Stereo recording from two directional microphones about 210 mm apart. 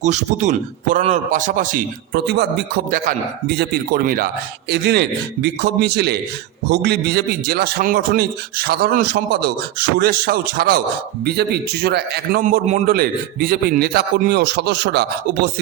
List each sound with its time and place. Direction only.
0.0 s a man's voice: 35° right (ahead or behind); by 15.4 s 50° right (ahead or behind)